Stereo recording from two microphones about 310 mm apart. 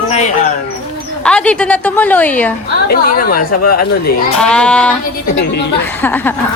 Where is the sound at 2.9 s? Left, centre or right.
Left.